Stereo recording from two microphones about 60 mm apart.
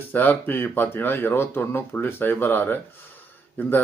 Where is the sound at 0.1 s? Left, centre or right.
Left.